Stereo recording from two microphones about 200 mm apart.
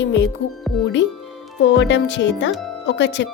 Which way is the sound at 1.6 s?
65° left (ahead or behind).